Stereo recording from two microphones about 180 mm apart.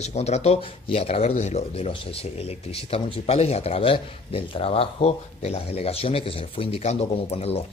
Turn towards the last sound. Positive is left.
turn(degrees=35)  # may be behind; listen again after turning